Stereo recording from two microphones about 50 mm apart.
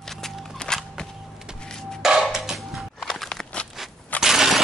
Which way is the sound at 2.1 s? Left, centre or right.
Centre.